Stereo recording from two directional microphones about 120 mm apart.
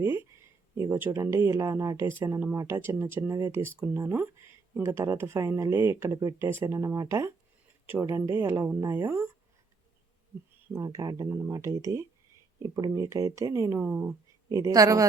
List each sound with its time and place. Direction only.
0.0 s speech: 20° right (ahead or behind)
10.7 s speech: 25° right (ahead or behind)